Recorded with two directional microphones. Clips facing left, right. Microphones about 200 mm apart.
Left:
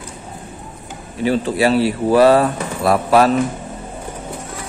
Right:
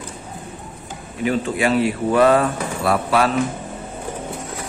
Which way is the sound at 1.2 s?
35° left (ahead or behind).